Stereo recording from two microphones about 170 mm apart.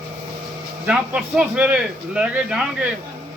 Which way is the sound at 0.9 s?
5° right (ahead or behind).